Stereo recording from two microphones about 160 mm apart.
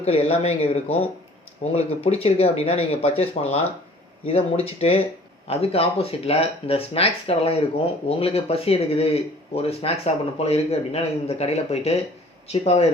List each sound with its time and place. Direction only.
0.0 s speech: 40° left (ahead or behind)